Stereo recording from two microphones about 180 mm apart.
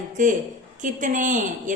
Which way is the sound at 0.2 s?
45° right (ahead or behind).